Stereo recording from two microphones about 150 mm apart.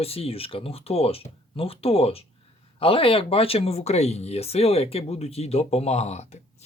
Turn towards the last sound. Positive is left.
turn(degrees=45)  # may be behind; listen again after turning